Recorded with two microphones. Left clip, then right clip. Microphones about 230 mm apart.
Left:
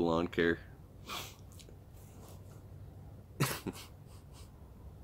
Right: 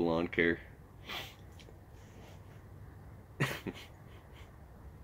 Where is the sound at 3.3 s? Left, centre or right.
Centre.